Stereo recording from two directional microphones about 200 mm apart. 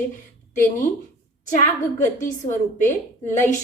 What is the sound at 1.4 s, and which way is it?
A woman's voice, 40° left (ahead or behind).